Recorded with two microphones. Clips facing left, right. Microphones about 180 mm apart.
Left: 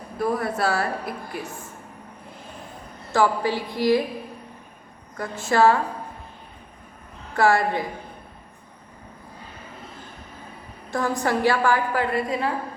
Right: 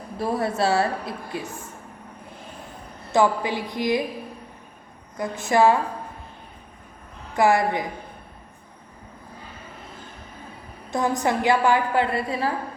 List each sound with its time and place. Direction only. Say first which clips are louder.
0.2 s a woman's voice: even; 25° right (ahead or behind)
3.1 s a woman's voice: right 1 dB; 20° right (ahead or behind)
5.1 s a woman's voice: right 1 dB; 15° right (ahead or behind)
7.3 s a woman's voice: even; 15° right (ahead or behind)
10.9 s a woman's voice: right 1 dB; 20° right (ahead or behind)